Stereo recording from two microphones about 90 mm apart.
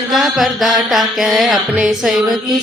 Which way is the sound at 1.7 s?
10° right (ahead or behind).